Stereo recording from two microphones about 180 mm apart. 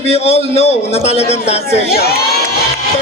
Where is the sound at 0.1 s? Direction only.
35° left (ahead or behind).